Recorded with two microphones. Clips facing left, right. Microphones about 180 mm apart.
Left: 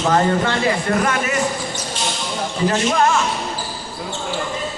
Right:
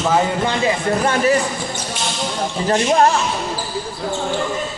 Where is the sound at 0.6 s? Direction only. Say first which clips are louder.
Right 1 dB; 30° right (ahead or behind).